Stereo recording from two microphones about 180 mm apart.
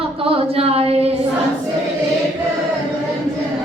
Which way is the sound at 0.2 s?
30° right (ahead or behind).